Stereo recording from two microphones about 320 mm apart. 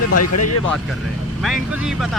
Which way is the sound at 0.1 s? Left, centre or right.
Left.